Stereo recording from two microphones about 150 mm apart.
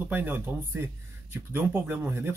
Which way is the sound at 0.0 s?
15° right (ahead or behind).